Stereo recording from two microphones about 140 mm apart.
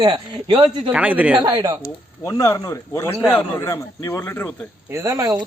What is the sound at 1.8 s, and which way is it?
A man's voice, 25° left (ahead or behind).